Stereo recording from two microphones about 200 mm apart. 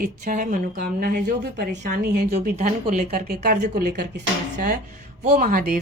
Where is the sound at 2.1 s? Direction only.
50° right (ahead or behind).